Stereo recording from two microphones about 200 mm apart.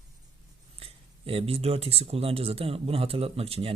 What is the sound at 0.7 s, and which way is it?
Speech, 30° right (ahead or behind).